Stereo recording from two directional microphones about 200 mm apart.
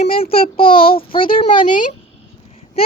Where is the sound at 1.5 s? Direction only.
40° left (ahead or behind).